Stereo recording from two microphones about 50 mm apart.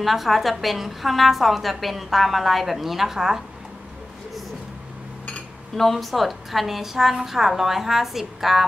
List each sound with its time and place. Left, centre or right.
0.0 s a woman's voice: centre
5.8 s a woman's voice: centre